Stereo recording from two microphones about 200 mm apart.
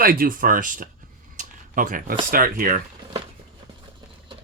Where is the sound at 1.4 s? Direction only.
40° right (ahead or behind).